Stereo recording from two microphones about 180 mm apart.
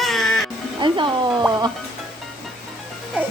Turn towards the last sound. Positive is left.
turn(degrees=-10)  # may be behind; listen again after turning